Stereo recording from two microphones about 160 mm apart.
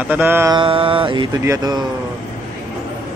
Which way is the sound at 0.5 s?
35° right (ahead or behind).